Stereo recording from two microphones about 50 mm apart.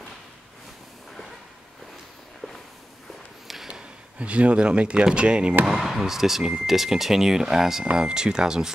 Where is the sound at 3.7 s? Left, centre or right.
Right.